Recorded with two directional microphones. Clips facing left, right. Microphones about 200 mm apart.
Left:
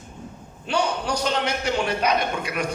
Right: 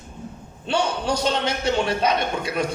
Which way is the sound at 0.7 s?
25° right (ahead or behind).